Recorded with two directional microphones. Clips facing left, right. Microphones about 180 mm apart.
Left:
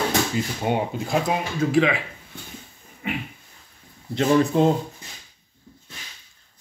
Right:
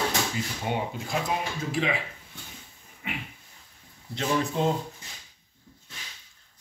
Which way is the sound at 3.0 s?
40° left (ahead or behind).